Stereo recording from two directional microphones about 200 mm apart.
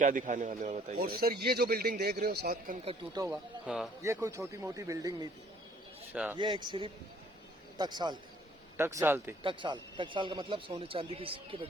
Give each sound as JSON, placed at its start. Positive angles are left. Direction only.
{"t": 0.0, "sound": "a man's voice", "side_deg": -40}
{"t": 3.2, "sound": "speech", "side_deg": -10}
{"t": 6.3, "sound": "a man's voice", "side_deg": -20}
{"t": 9.4, "sound": "a man's voice", "side_deg": -25}